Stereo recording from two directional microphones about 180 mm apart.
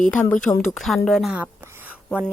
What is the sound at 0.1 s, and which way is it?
A woman's voice, 10° left (ahead or behind).